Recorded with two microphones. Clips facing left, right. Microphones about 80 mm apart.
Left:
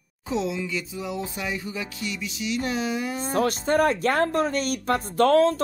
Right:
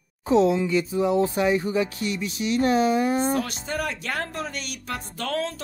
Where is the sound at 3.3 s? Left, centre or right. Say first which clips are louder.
Left 6 dB; left.